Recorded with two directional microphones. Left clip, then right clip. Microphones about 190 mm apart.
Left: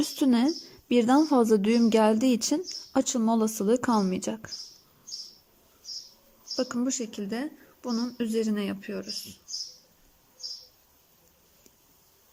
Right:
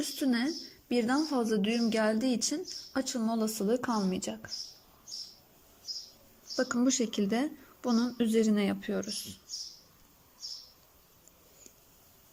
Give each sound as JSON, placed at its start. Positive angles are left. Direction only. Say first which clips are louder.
{"t": 0.0, "sound": "a woman's voice", "louder": "left 6 dB", "side_deg": 20}
{"t": 6.6, "sound": "a woman's voice", "louder": "right 1 dB", "side_deg": 5}